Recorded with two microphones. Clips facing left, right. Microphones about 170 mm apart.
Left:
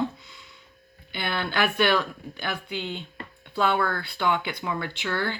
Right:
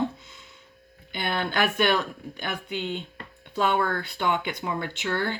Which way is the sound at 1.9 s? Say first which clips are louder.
Left 1 dB; 20° right (ahead or behind).